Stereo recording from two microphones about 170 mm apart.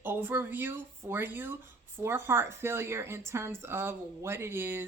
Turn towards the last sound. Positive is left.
turn(degrees=-15)  # may be behind; listen again after turning